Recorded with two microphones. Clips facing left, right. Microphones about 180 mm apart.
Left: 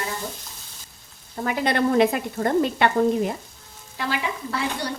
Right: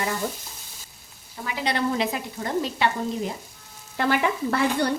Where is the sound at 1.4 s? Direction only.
50° left (ahead or behind).